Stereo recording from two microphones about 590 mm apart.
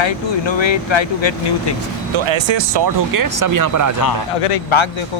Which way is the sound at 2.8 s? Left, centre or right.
Right.